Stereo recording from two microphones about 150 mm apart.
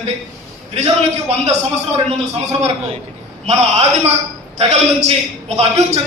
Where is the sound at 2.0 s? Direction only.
45° right (ahead or behind).